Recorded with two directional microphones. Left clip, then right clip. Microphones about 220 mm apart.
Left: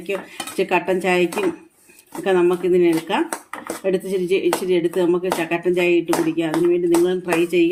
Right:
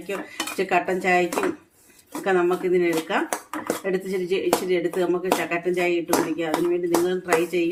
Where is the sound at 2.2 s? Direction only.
40° left (ahead or behind).